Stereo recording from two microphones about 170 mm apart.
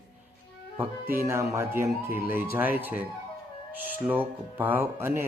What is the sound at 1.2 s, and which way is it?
Speech, 15° right (ahead or behind).